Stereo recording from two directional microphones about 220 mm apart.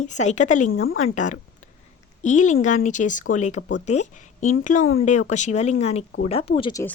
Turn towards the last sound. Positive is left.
turn(degrees=20)  # may be behind; listen again after turning